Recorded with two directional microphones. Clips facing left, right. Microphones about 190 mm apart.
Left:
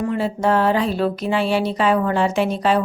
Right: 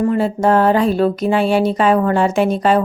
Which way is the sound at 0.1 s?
45° right (ahead or behind).